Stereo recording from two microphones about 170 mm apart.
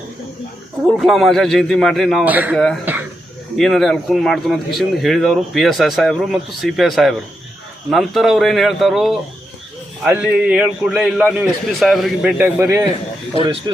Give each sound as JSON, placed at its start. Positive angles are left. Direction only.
{"t": 0.9, "sound": "speech", "side_deg": 0}
{"t": 2.2, "sound": "a man's voice", "side_deg": -10}
{"t": 2.9, "sound": "a sound", "side_deg": -10}
{"t": 3.6, "sound": "speech", "side_deg": 0}